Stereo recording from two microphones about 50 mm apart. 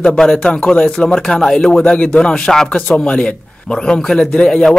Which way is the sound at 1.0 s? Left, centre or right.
Centre.